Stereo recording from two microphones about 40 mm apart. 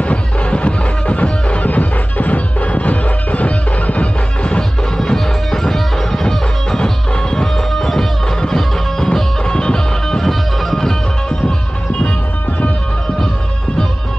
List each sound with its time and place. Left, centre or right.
0.0 s music: left
10.2 s music: centre